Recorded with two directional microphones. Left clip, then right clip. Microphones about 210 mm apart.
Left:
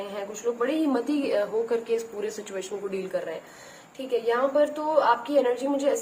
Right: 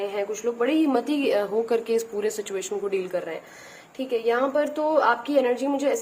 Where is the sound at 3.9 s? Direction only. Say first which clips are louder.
Right 2 dB; 50° right (ahead or behind).